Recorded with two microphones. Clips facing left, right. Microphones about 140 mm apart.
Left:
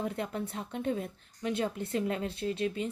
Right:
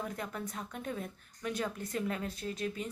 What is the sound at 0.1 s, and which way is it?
A woman's voice, 30° left (ahead or behind).